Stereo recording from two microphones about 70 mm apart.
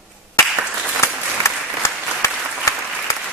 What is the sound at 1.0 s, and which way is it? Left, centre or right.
Applause, left.